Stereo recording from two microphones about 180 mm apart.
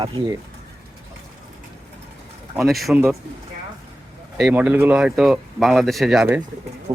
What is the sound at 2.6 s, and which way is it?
Speech, centre (ahead or behind).